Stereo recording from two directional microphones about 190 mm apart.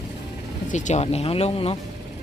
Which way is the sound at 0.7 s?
40° left (ahead or behind).